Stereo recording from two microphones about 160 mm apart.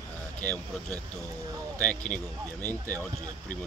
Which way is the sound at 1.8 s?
5° left (ahead or behind).